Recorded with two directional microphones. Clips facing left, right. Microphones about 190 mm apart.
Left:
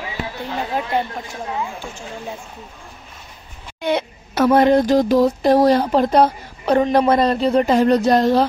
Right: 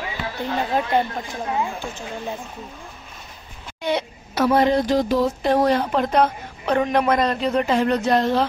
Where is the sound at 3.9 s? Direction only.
55° left (ahead or behind); by 8.4 s 40° left (ahead or behind).